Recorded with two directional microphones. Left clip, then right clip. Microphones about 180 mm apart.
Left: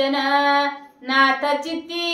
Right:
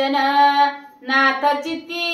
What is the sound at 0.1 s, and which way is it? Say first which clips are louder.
Female singing: right 3 dB; 15° left (ahead or behind).